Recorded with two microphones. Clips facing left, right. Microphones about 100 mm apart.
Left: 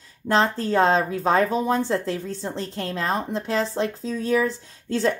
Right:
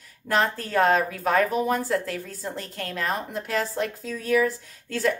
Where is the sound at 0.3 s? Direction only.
25° left (ahead or behind).